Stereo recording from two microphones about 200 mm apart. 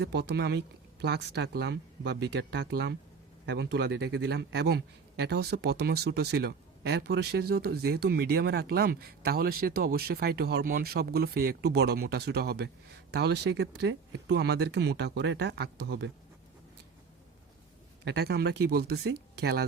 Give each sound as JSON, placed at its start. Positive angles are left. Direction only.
{"t": 0.0, "sound": "a man's voice", "side_deg": -55}
{"t": 18.0, "sound": "a man's voice", "side_deg": -55}